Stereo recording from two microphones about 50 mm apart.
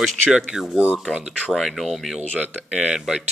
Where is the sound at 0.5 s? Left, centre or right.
Centre.